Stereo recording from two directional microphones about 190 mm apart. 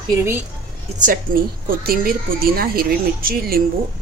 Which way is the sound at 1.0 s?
45° right (ahead or behind).